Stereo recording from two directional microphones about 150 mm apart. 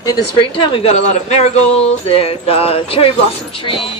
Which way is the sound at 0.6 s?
40° left (ahead or behind).